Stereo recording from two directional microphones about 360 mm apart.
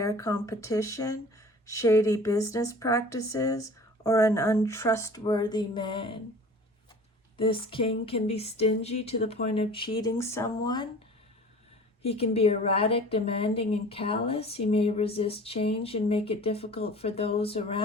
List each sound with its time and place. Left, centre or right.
0.0 s a woman's voice: centre
7.3 s a woman's voice: centre
12.0 s a woman's voice: centre